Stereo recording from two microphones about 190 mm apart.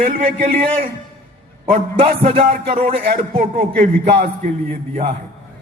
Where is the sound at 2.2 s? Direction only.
30° right (ahead or behind).